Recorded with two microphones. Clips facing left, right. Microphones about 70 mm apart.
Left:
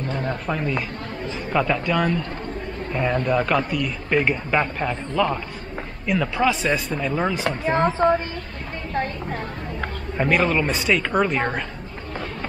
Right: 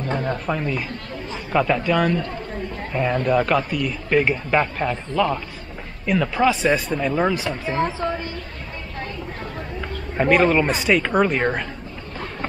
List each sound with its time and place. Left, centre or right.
0.5 s a man's voice: centre
7.7 s a woman's voice: left
10.1 s a man's voice: centre